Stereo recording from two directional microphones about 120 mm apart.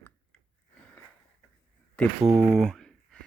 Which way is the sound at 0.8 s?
10° left (ahead or behind).